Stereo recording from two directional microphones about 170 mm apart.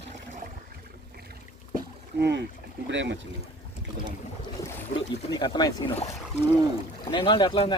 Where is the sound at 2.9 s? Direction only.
90° right.